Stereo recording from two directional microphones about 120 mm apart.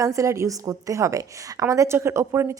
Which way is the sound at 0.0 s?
25° right (ahead or behind).